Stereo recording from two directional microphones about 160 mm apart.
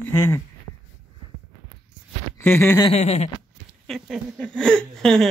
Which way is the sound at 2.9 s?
40° left (ahead or behind).